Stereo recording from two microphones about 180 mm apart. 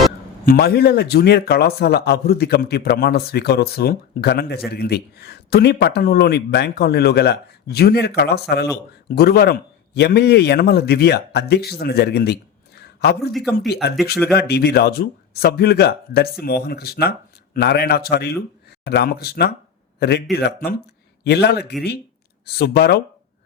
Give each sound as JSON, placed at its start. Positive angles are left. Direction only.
{"t": 0.4, "sound": "a man's voice", "side_deg": 60}
{"t": 13.3, "sound": "speech", "side_deg": 0}
{"t": 14.3, "sound": "a man's voice", "side_deg": 65}